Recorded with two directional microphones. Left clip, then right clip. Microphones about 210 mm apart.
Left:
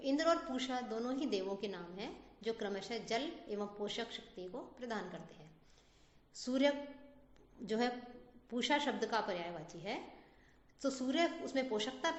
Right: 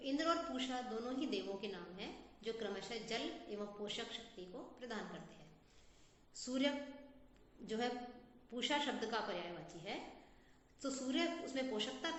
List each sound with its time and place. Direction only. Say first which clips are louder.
0.0 s a woman's voice: left 4 dB; 45° left (ahead or behind)
6.4 s a woman's voice: left 5 dB; 50° left (ahead or behind)